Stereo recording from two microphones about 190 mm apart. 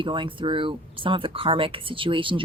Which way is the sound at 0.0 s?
25° right (ahead or behind).